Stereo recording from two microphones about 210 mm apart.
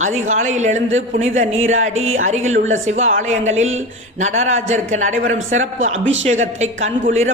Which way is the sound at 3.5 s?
70° right (ahead or behind).